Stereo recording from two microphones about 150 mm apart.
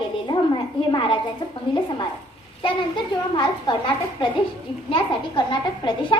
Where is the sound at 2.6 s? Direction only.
30° left (ahead or behind).